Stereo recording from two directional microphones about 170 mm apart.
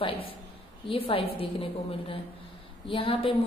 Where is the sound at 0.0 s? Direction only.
30° left (ahead or behind).